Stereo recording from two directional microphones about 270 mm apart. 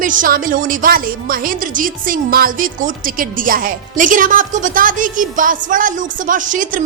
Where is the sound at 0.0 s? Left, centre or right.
Right.